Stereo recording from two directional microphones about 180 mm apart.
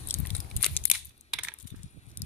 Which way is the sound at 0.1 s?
15° left (ahead or behind).